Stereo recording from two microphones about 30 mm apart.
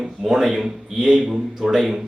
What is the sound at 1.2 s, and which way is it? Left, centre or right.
Speech, centre.